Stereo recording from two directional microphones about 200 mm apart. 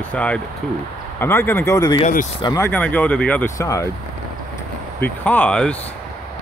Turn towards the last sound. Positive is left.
turn(degrees=5)  # may be behind; listen again after turning